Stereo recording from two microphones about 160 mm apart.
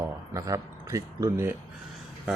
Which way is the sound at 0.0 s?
20° right (ahead or behind).